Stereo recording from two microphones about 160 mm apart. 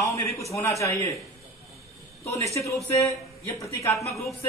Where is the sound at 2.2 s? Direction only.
20° left (ahead or behind).